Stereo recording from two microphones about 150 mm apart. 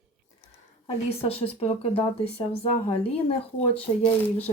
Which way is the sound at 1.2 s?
40° left (ahead or behind).